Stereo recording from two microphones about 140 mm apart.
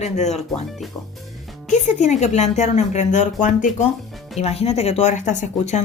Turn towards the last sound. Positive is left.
turn(degrees=55)  # may be behind; listen again after turning